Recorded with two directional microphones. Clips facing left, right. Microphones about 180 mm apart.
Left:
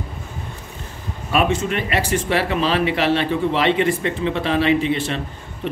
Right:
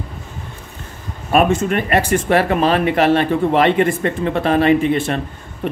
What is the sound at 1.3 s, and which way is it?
Speech, 50° right (ahead or behind).